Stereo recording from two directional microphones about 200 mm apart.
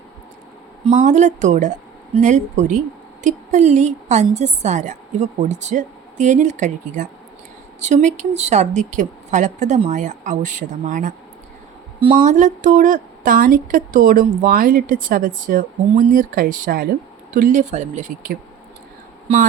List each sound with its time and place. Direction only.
0.9 s a woman's voice: 35° right (ahead or behind)
11.9 s a woman's voice: 25° right (ahead or behind)
12.2 s a woman's voice: 40° right (ahead or behind)